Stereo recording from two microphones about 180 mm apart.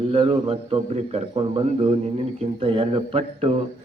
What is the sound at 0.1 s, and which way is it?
A man's voice, 30° right (ahead or behind).